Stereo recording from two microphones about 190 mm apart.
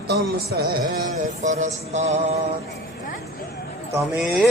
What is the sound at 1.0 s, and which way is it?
Music, 40° right (ahead or behind).